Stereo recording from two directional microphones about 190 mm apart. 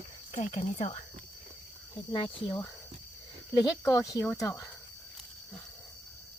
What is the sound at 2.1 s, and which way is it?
Speech, 25° left (ahead or behind).